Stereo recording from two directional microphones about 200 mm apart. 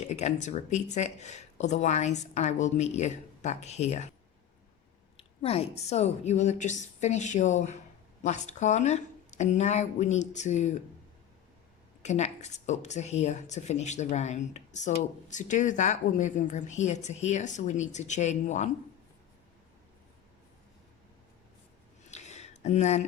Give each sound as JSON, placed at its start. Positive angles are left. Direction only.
{"t": 0.0, "sound": "speech", "side_deg": 35}
{"t": 5.1, "sound": "speech", "side_deg": 30}
{"t": 12.0, "sound": "speech", "side_deg": 35}
{"t": 22.1, "sound": "a sound", "side_deg": 35}